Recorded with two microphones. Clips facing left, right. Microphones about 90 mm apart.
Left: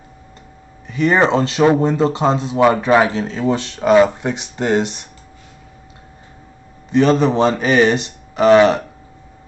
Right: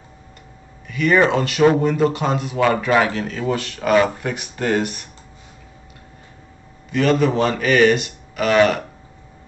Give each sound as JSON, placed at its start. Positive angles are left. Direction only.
{"t": 0.8, "sound": "speech", "side_deg": 25}
{"t": 6.9, "sound": "speech", "side_deg": 25}